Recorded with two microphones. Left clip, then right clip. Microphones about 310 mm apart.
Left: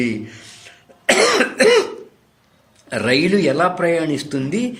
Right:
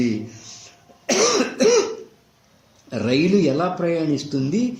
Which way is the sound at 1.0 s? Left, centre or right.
Left.